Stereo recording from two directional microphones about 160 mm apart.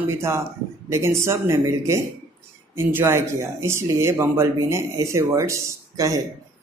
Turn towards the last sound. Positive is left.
turn(degrees=-20)  # may be behind; listen again after turning